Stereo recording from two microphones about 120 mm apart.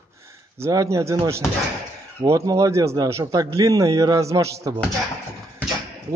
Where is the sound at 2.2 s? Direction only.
30° right (ahead or behind).